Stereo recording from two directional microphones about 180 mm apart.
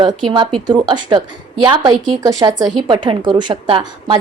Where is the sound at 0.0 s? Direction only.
25° right (ahead or behind).